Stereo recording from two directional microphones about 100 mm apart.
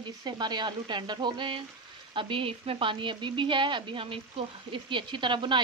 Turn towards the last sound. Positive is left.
turn(degrees=-50)  # may be behind; listen again after turning